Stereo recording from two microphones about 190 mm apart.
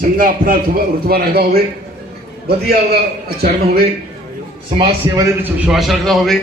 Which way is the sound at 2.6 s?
55° right (ahead or behind).